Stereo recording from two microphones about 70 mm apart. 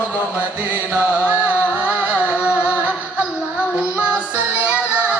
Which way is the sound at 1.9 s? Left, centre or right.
Centre.